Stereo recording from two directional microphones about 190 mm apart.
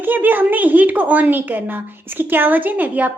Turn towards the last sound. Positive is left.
turn(degrees=-10)  # may be behind; listen again after turning